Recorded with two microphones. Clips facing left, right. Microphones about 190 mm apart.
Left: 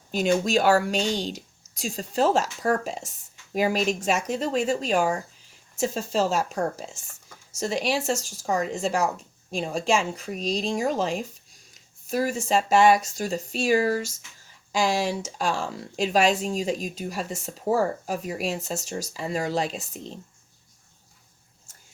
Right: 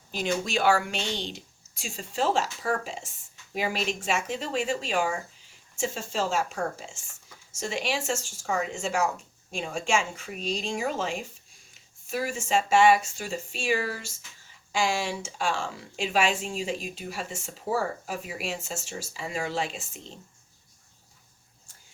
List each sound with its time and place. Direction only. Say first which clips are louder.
0.1 s speech: left 6 dB; 45° left (ahead or behind)